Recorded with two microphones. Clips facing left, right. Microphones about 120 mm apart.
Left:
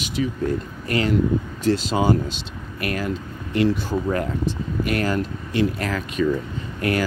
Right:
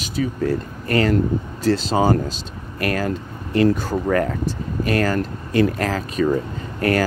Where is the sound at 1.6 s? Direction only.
35° right (ahead or behind).